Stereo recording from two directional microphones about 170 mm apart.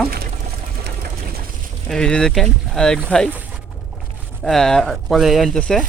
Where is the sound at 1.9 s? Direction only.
5° left (ahead or behind).